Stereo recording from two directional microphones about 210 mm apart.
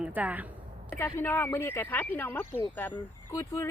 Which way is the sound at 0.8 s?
10° left (ahead or behind).